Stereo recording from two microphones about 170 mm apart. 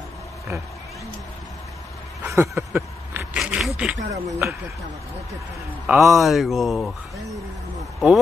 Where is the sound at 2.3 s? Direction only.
15° right (ahead or behind).